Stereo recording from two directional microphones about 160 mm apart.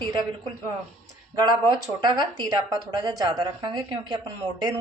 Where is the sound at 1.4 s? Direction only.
25° right (ahead or behind).